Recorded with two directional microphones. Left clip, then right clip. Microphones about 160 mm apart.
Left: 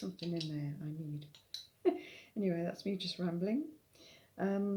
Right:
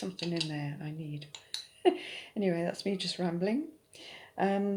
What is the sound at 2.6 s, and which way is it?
Speech, 15° left (ahead or behind).